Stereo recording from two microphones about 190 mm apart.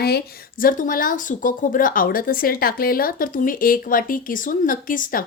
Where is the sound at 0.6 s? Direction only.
45° left (ahead or behind).